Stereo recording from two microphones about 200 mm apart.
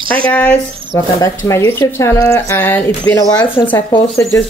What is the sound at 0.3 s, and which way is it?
Speech, 5° left (ahead or behind).